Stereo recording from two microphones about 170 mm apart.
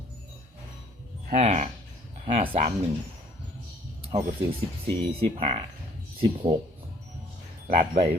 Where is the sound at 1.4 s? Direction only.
40° right (ahead or behind).